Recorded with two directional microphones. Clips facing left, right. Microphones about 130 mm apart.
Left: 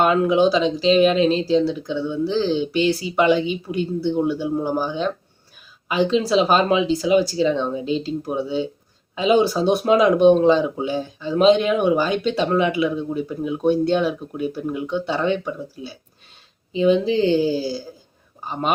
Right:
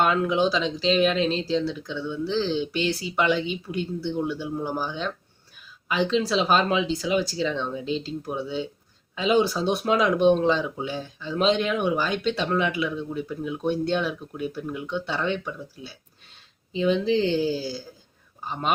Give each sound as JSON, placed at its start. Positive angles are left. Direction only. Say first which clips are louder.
{"t": 0.0, "sound": "speech", "louder": "left 5 dB", "side_deg": 10}
{"t": 12.9, "sound": "speech", "louder": "left 5 dB", "side_deg": 20}